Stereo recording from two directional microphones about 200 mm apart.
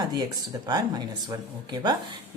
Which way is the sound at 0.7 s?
20° right (ahead or behind).